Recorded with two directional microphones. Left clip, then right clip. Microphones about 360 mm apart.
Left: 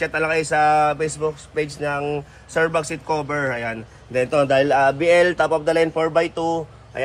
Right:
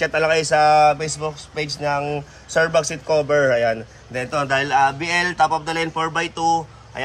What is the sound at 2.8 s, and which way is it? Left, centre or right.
A man's voice, centre.